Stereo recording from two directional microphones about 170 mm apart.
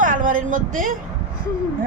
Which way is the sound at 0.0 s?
50° right (ahead or behind).